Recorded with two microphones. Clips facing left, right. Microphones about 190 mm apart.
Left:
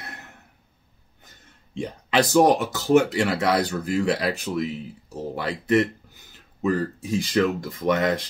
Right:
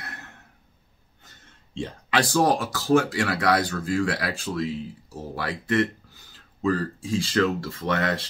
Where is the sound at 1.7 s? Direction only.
20° left (ahead or behind).